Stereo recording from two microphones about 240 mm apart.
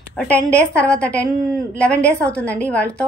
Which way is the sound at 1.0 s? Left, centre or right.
Centre.